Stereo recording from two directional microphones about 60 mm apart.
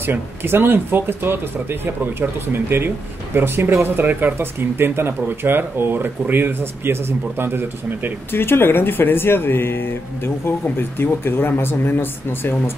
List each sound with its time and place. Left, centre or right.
0.0 s speech: right
8.3 s speech: left